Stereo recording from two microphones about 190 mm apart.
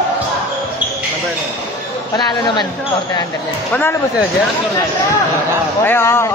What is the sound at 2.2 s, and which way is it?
Speech, 20° left (ahead or behind).